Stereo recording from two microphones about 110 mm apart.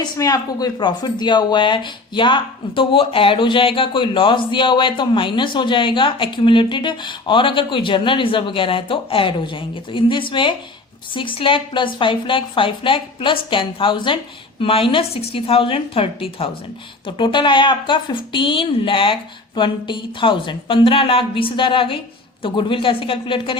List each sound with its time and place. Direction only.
0.0 s a woman's voice: 35° left (ahead or behind); by 16.5 s 55° left (ahead or behind)
17.1 s speech: 45° left (ahead or behind)